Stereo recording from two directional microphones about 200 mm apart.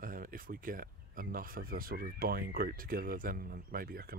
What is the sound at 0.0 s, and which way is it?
Speech, 45° right (ahead or behind).